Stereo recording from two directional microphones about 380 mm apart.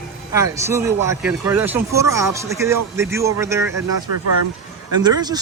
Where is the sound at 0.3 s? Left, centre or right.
Centre.